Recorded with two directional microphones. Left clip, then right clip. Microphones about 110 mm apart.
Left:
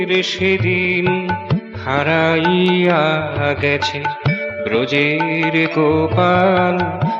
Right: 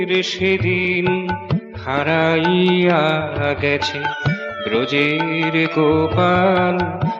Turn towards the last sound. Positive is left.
turn(degrees=45)  # may be behind; listen again after turning